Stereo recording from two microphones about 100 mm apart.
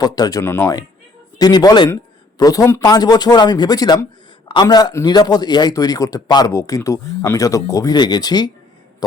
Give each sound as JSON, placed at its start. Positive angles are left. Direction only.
{"t": 0.0, "sound": "speech", "side_deg": 35}
{"t": 0.4, "sound": "speech", "side_deg": 25}
{"t": 1.4, "sound": "speech", "side_deg": 40}
{"t": 2.8, "sound": "speech", "side_deg": 40}